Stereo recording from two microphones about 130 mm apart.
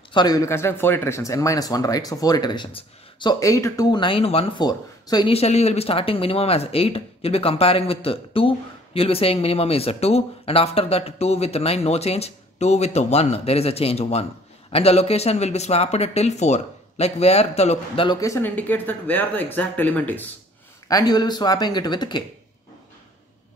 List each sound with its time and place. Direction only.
0.1 s speech: 30° left (ahead or behind)
4.0 s speech: 45° left (ahead or behind)
4.6 s speech: 30° left (ahead or behind)
5.3 s speech: 55° left (ahead or behind)
18.0 s speech: 30° left (ahead or behind)
18.6 s speech: 15° left (ahead or behind)
20.9 s speech: 30° left (ahead or behind)